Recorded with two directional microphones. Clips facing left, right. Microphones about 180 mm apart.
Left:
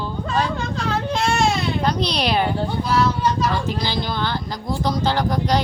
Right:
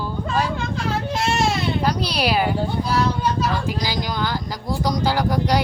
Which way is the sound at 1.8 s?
10° right (ahead or behind).